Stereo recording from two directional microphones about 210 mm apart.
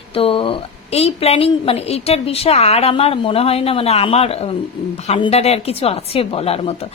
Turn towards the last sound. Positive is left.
turn(degrees=30)  # may be behind; listen again after turning